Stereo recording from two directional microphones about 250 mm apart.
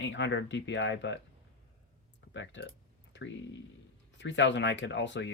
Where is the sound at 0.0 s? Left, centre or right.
Left.